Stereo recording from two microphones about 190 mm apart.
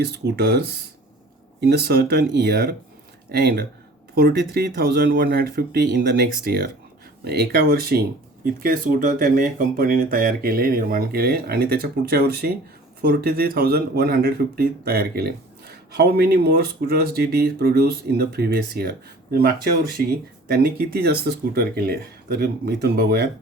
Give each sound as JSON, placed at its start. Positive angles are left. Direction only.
{"t": 0.0, "sound": "speech", "side_deg": -60}
{"t": 1.6, "sound": "speech", "side_deg": -55}